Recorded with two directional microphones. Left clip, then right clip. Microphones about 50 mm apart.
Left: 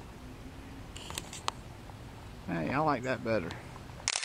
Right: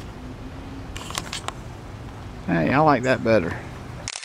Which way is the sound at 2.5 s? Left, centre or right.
Right.